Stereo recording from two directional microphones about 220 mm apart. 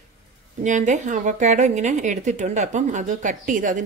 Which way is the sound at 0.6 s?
35° right (ahead or behind).